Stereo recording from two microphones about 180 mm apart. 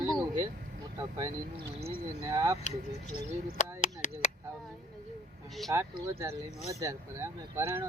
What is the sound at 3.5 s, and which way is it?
Chop, 40° left (ahead or behind).